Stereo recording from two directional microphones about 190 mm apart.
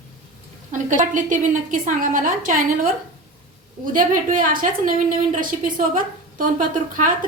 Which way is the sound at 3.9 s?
45° right (ahead or behind).